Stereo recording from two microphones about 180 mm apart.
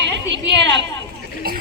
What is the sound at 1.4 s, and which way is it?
Speech, 55° right (ahead or behind).